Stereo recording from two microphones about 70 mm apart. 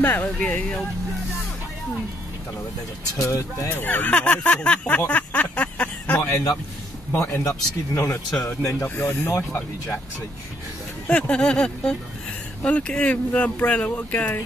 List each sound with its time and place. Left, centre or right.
0.0 s speech: left
3.2 s speech: left
3.6 s speech: left
7.1 s speech: left
8.7 s speech: left
9.0 s speech: left
9.5 s speech: left
11.1 s speech: left
11.3 s speech: centre